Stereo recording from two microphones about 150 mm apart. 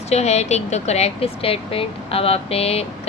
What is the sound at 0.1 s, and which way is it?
Speech, 45° left (ahead or behind).